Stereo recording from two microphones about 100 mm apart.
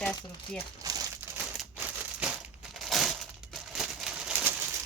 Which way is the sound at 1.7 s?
20° right (ahead or behind).